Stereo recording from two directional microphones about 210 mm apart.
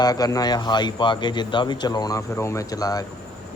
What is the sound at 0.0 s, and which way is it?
Speech, 20° left (ahead or behind).